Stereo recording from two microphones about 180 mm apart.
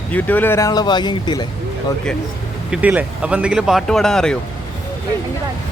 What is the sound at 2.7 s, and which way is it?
Speech, 10° right (ahead or behind).